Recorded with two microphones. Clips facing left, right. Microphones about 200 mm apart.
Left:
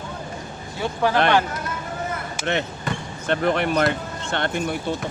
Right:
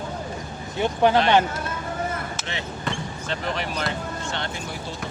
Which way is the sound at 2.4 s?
55° left (ahead or behind).